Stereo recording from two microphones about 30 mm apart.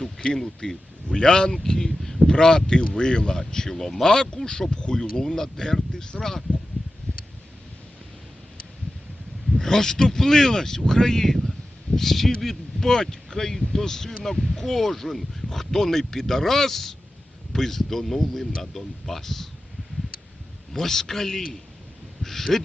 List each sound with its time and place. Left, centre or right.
0.0 s speech: left
1.9 s a sound: centre
2.2 s speech: left
3.7 s speech: centre
4.0 s speech: left
9.6 s speech: centre
12.4 s a sound: centre
12.9 s speech: centre
20.7 s speech: centre